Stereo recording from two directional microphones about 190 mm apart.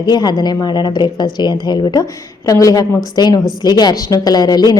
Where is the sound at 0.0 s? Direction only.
20° left (ahead or behind).